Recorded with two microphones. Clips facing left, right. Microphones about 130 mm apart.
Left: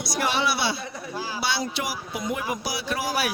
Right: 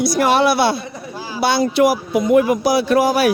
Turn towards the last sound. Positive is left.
turn(degrees=-55)  # may be behind; listen again after turning